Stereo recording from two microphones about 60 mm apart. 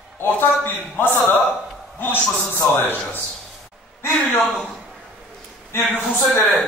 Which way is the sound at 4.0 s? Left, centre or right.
Left.